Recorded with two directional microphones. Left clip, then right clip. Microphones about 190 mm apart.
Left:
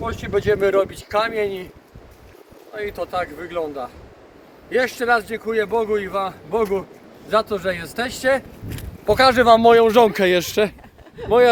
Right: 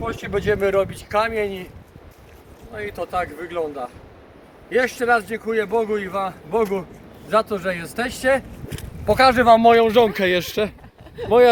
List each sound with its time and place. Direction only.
0.0 s speech: centre (ahead or behind)
2.7 s speech: 5° left (ahead or behind)
9.4 s speech: 25° left (ahead or behind)
9.8 s a man's voice: 45° left (ahead or behind)
11.2 s speech: 25° right (ahead or behind)